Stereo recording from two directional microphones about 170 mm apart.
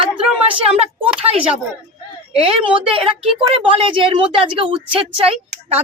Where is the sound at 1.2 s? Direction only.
35° right (ahead or behind).